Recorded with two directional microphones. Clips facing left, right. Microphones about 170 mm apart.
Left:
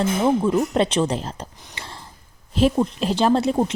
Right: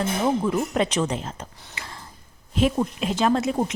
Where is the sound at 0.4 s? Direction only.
20° left (ahead or behind).